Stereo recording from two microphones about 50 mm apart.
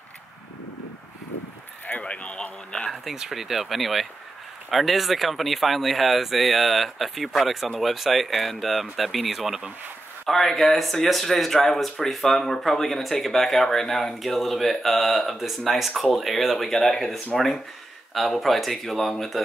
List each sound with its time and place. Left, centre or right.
1.9 s a sound: left
3.2 s speech: centre
10.2 s speech: centre